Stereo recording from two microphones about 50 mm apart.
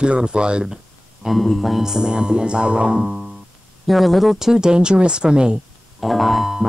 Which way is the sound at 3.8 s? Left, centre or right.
Centre.